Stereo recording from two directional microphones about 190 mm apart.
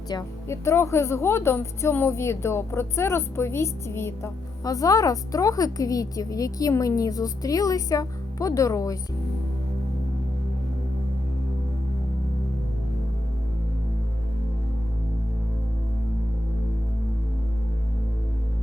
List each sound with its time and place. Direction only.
0.1 s a woman's voice: 15° left (ahead or behind)